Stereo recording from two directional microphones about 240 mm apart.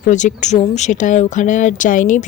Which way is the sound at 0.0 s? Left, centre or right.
Left.